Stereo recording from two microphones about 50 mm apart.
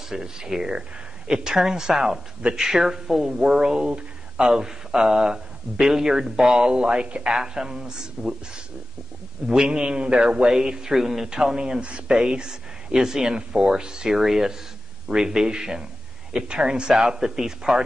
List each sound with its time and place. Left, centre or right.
0.1 s speech: centre
9.5 s speech: centre